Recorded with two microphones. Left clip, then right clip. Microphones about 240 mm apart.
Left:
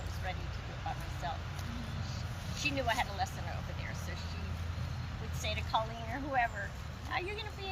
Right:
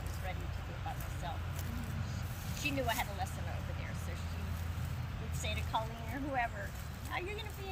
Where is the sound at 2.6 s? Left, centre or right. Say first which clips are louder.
Left 3 dB; centre.